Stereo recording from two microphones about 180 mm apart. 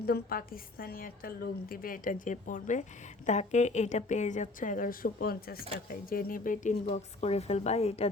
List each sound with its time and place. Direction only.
0.0 s a woman's voice: 55° left (ahead or behind); by 8.1 s 35° left (ahead or behind)